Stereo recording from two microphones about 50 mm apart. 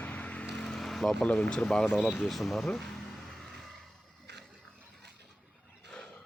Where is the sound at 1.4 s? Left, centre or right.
Left.